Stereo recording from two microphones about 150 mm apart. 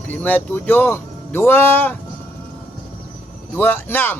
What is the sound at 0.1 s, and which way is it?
Speech, 10° left (ahead or behind).